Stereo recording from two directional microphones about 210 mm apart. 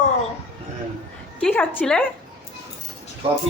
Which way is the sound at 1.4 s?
5° left (ahead or behind).